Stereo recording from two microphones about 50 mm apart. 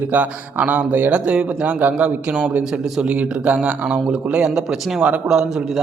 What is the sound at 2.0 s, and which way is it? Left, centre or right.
Speech, right.